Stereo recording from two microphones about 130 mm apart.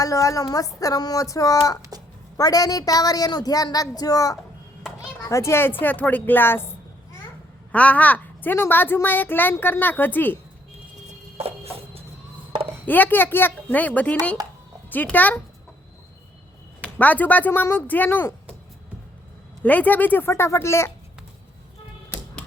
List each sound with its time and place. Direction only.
0.0 s a woman's voice: 25° left (ahead or behind)
7.7 s a woman's voice: 10° left (ahead or behind)
11.3 s music: 50° right (ahead or behind)
12.8 s a woman's voice: 15° left (ahead or behind)
17.0 s a woman's voice: 15° left (ahead or behind)
19.6 s a woman's voice: 10° left (ahead or behind)
22.1 s tap: 10° left (ahead or behind)